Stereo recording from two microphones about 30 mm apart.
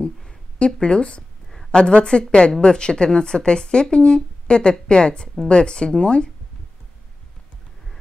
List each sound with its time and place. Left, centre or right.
0.6 s a woman's voice: left